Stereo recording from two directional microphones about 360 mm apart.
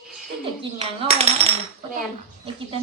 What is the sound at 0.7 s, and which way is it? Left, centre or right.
Speech, centre.